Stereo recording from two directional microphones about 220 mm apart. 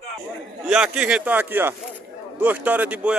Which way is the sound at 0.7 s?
5° right (ahead or behind).